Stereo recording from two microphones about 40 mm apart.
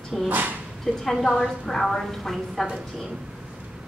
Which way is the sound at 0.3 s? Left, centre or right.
Right.